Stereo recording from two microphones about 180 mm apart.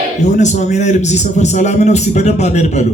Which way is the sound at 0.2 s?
40° left (ahead or behind).